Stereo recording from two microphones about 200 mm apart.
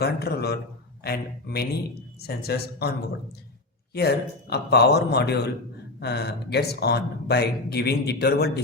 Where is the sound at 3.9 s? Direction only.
55° left (ahead or behind).